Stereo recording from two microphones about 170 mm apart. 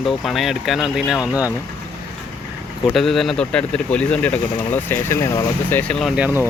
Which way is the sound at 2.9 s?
Centre (ahead or behind).